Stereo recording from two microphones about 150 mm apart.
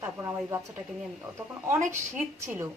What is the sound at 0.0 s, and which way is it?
Speech, 20° right (ahead or behind).